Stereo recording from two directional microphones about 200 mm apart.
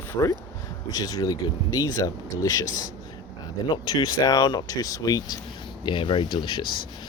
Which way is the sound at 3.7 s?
20° left (ahead or behind).